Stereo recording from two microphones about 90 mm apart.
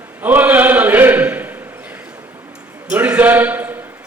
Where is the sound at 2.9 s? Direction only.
20° right (ahead or behind).